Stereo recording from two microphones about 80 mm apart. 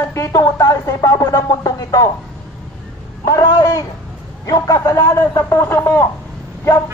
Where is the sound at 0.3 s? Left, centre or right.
Left.